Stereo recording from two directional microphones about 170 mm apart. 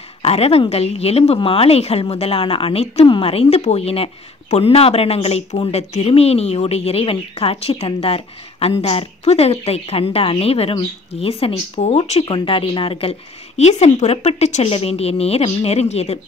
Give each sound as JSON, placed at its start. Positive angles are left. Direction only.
{"t": 0.2, "sound": "speech", "side_deg": 35}